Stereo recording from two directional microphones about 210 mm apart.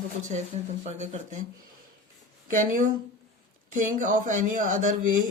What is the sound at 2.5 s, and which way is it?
Speech, 40° right (ahead or behind).